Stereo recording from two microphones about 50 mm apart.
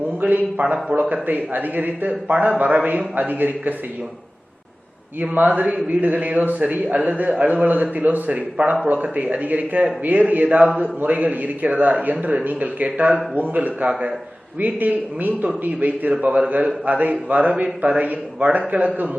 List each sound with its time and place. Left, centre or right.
0.2 s a man's voice: right
0.6 s a man's voice: right
0.9 s a man's voice: right
5.2 s a man's voice: right